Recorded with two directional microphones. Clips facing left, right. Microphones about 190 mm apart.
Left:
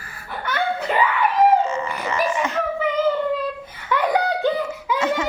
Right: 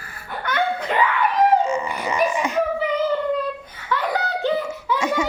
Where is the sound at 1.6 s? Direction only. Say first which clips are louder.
Right 1 dB; 15° right (ahead or behind).